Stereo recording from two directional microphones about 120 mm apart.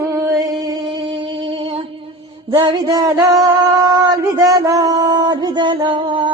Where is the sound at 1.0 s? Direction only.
45° right (ahead or behind).